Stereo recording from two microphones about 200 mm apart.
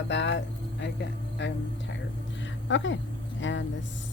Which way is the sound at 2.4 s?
65° left (ahead or behind).